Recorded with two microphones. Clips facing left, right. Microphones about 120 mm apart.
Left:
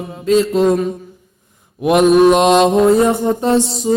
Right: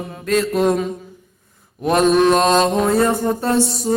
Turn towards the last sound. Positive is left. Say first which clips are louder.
# left 3 dB
turn(degrees=10)  # may be behind; listen again after turning